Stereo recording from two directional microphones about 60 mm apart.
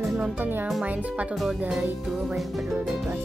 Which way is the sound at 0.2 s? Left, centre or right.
Right.